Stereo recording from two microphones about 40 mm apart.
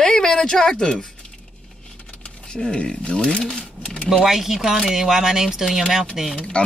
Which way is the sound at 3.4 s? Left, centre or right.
Centre.